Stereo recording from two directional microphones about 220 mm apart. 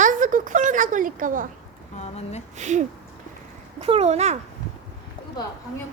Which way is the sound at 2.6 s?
35° right (ahead or behind).